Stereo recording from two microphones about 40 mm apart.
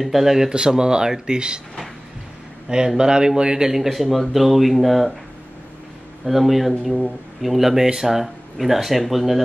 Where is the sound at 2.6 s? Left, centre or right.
Centre.